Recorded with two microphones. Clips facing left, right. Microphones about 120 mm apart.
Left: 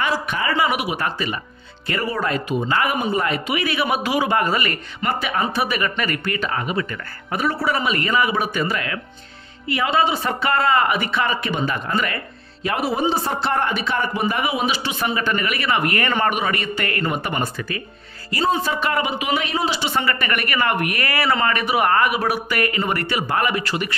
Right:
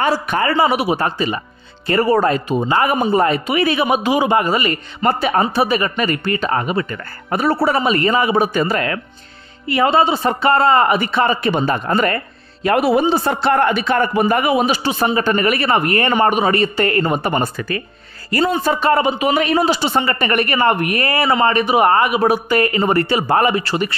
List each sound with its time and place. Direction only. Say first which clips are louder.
0.0 s speech: right 5 dB; 40° right (ahead or behind)
0.6 s a man's voice: right 5 dB; 30° right (ahead or behind)
1.9 s a man's voice: right 9 dB; 40° right (ahead or behind); by 4.7 s 20° right (ahead or behind)
5.0 s a man's voice: right 6 dB; 40° right (ahead or behind)
12.6 s a man's voice: right 7 dB; 65° right (ahead or behind); by 16.1 s 35° right (ahead or behind)
16.1 s a man's voice: right 6 dB; 25° right (ahead or behind); by 17.8 s 45° right (ahead or behind)
18.3 s speech: right 4 dB; 60° right (ahead or behind)
18.8 s a man's voice: right 7 dB; 35° right (ahead or behind); by 19.8 s 50° right (ahead or behind)
20.0 s speech: right 5 dB; 25° right (ahead or behind)